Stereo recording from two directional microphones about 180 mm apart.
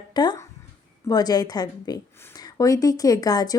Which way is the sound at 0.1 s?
25° left (ahead or behind).